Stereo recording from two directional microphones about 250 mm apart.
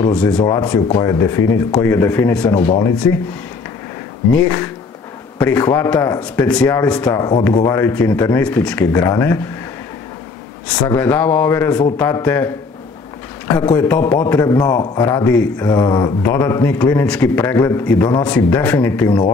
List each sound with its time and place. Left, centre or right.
0.0 s speech: centre
0.5 s a man's voice: centre
4.3 s a man's voice: centre
7.1 s a man's voice: centre
10.9 s a man's voice: centre
13.6 s a man's voice: centre